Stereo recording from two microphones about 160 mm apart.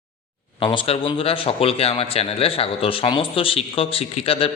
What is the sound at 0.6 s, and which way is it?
A man's voice, 30° left (ahead or behind).